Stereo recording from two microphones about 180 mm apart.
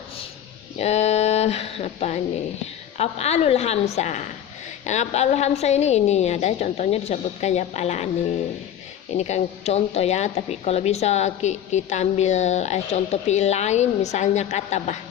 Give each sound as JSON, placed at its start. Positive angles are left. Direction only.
{"t": 0.8, "sound": "speech", "side_deg": 35}
{"t": 9.1, "sound": "speech", "side_deg": 40}